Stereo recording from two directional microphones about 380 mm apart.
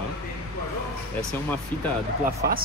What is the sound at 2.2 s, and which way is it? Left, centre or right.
Speech, right.